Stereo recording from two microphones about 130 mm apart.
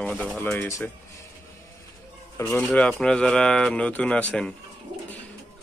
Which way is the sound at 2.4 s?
20° left (ahead or behind).